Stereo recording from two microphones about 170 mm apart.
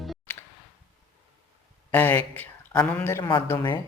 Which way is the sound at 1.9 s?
10° left (ahead or behind).